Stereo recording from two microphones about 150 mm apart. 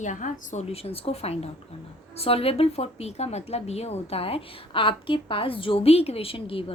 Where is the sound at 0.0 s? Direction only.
55° left (ahead or behind).